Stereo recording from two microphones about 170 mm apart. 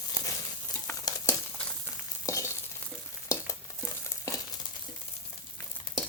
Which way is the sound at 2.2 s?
20° left (ahead or behind).